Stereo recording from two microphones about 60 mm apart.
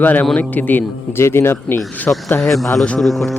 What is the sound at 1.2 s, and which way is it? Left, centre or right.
Speech, left.